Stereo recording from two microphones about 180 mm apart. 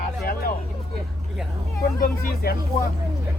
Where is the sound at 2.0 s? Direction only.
55° left (ahead or behind).